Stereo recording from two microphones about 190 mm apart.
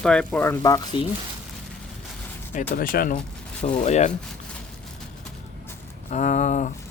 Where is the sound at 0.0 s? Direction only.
5° left (ahead or behind); by 1.0 s 20° left (ahead or behind).